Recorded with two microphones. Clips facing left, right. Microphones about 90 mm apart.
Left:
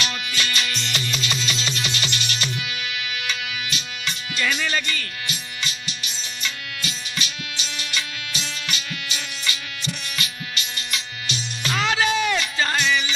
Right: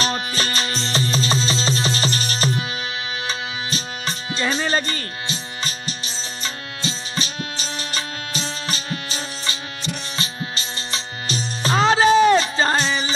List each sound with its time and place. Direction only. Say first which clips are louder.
0.0 s music: right 4 dB; 35° right (ahead or behind)